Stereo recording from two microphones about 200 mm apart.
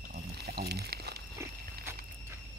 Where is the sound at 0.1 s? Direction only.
50° right (ahead or behind).